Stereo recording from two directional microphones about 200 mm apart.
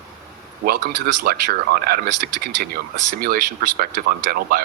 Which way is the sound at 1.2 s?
50° right (ahead or behind).